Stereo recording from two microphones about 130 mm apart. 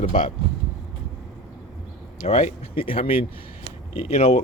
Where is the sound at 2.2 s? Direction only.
70° left (ahead or behind).